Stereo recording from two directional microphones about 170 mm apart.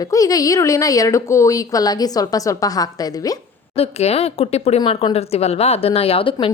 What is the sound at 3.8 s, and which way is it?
Speech, 35° left (ahead or behind).